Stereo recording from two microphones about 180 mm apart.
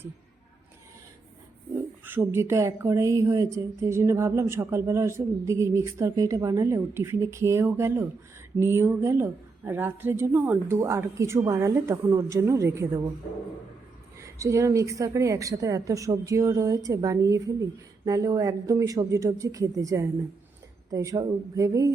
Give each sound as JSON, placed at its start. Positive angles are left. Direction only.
{"t": 2.0, "sound": "speech", "side_deg": -10}
{"t": 14.2, "sound": "a woman's voice", "side_deg": -15}